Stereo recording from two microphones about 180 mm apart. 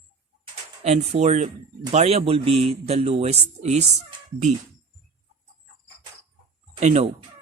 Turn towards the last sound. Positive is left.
turn(degrees=-40)  # may be behind; listen again after turning